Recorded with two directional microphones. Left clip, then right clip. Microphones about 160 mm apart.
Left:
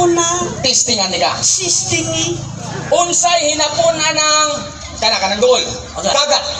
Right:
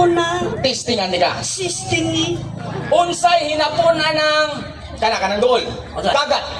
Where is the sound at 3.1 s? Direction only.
Centre (ahead or behind).